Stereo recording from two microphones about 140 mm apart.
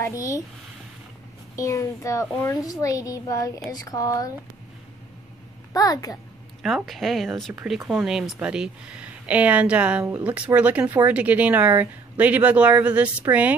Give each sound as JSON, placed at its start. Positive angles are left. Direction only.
{"t": 1.6, "sound": "a child's voice", "side_deg": 20}
{"t": 5.7, "sound": "a child's voice", "side_deg": 25}
{"t": 6.6, "sound": "speech", "side_deg": 0}